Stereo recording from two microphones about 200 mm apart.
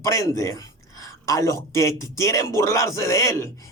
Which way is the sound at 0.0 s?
15° left (ahead or behind).